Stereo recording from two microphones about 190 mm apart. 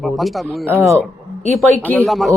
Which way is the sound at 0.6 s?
15° right (ahead or behind).